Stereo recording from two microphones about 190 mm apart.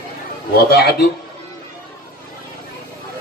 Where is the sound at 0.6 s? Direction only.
55° left (ahead or behind).